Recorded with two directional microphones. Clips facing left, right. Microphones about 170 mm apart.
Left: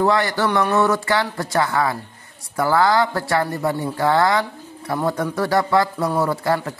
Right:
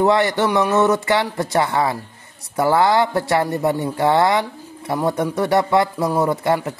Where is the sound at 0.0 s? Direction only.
20° right (ahead or behind).